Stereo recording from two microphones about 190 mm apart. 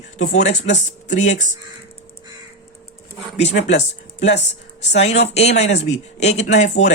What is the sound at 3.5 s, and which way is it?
Speech, 65° left (ahead or behind).